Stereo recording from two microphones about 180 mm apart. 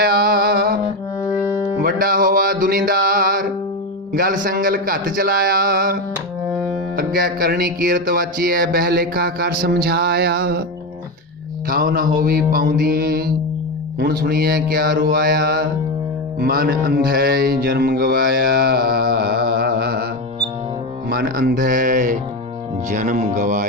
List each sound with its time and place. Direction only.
0.0 s music: 55° right (ahead or behind)
1.8 s music: 50° right (ahead or behind)
11.7 s music: 55° right (ahead or behind)
21.1 s music: 55° right (ahead or behind)